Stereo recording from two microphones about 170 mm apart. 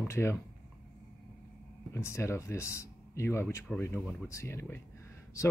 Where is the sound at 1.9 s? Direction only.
15° left (ahead or behind).